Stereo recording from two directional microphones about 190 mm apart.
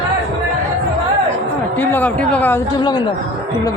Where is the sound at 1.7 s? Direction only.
10° left (ahead or behind).